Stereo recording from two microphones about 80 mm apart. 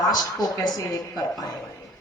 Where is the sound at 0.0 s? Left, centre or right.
Left.